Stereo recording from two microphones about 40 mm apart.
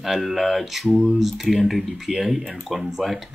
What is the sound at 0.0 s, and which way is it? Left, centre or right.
Speech, centre.